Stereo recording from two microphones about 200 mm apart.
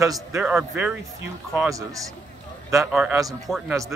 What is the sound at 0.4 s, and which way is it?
Speech, 5° right (ahead or behind).